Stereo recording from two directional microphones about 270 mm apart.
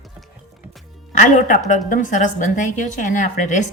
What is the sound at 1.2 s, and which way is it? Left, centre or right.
A woman's voice, left.